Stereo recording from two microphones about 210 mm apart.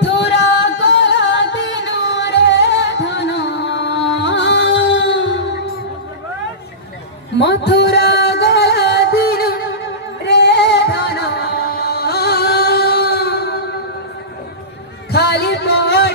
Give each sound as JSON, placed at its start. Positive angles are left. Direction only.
{"t": 0.3, "sound": "music", "side_deg": 55}
{"t": 7.3, "sound": "music", "side_deg": 55}
{"t": 15.0, "sound": "music", "side_deg": 50}